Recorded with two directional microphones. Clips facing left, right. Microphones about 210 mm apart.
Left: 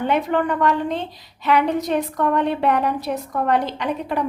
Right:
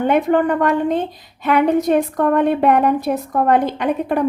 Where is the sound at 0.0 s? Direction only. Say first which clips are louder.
Right 5 dB; 50° right (ahead or behind).